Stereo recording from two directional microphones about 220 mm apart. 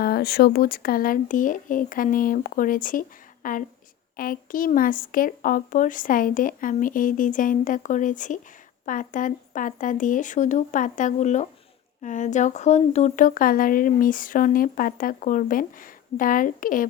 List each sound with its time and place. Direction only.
0.0 s speech: 45° left (ahead or behind)